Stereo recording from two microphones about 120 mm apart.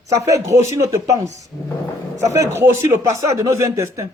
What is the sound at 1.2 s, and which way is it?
Speech, 75° right (ahead or behind).